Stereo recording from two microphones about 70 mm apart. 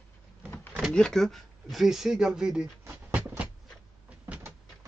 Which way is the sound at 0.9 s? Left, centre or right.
Centre.